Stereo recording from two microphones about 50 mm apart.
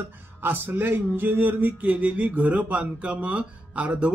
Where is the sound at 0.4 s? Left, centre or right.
Right.